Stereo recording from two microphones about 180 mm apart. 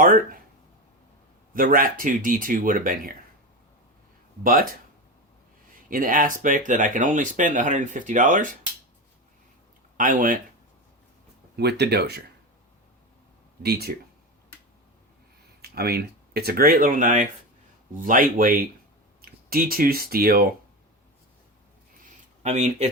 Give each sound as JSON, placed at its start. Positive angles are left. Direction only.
{"t": 1.5, "sound": "speech", "side_deg": -50}
{"t": 4.4, "sound": "speech", "side_deg": -50}
{"t": 5.9, "sound": "speech", "side_deg": -50}
{"t": 10.0, "sound": "speech", "side_deg": -50}
{"t": 11.5, "sound": "speech", "side_deg": -65}
{"t": 13.6, "sound": "speech", "side_deg": -60}
{"t": 15.6, "sound": "speech", "side_deg": -60}
{"t": 22.4, "sound": "speech", "side_deg": -40}